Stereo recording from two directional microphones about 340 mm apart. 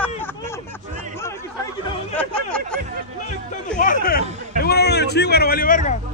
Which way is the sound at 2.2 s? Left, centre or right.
Centre.